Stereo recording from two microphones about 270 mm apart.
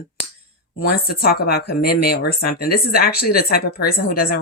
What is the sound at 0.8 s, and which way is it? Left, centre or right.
Speech, left.